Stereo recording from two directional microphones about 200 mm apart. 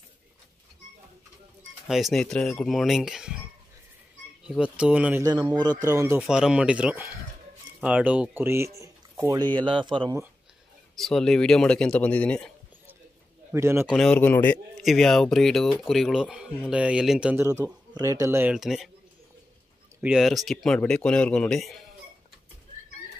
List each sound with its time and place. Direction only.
1.9 s speech: centre (ahead or behind)
4.5 s speech: 5° right (ahead or behind); by 10.2 s 20° right (ahead or behind)
11.0 s speech: centre (ahead or behind)
13.5 s a man's voice: 10° right (ahead or behind)
13.9 s speech: 5° left (ahead or behind)
17.9 s speech: 15° right (ahead or behind); by 18.9 s centre (ahead or behind)
20.0 s speech: 5° right (ahead or behind)